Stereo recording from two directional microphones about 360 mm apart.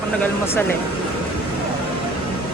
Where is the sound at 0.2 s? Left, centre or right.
Centre.